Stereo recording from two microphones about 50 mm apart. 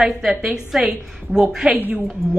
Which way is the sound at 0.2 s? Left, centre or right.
Centre.